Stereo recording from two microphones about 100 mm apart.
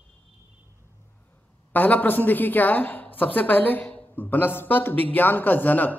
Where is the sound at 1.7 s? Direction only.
15° left (ahead or behind).